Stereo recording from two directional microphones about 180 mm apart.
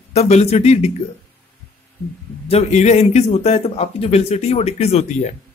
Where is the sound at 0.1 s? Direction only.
35° left (ahead or behind).